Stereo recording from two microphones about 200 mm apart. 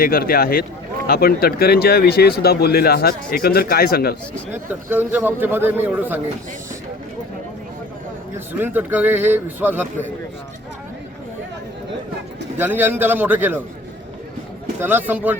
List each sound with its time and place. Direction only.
0.0 s speech: 45° left (ahead or behind)
4.5 s a man's voice: 10° right (ahead or behind)
8.5 s a man's voice: 10° right (ahead or behind)
12.5 s a man's voice: 10° right (ahead or behind)
14.8 s a man's voice: 10° right (ahead or behind)